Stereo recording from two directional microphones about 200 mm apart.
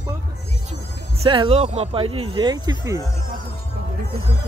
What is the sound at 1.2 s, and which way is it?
Speech, 25° right (ahead or behind).